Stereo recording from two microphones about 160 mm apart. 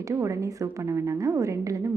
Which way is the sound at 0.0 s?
20° right (ahead or behind).